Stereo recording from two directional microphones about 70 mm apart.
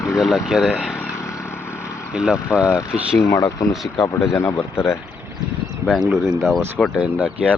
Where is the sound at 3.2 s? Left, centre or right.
Left.